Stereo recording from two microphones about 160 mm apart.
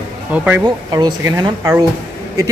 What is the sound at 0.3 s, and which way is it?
Speech, 10° right (ahead or behind).